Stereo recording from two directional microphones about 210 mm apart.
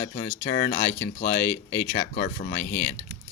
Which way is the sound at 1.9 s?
40° left (ahead or behind).